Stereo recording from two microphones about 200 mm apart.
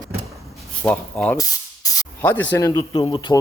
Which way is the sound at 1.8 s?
15° left (ahead or behind).